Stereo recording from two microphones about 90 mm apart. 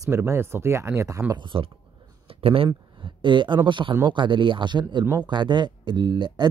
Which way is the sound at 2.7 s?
65° right (ahead or behind).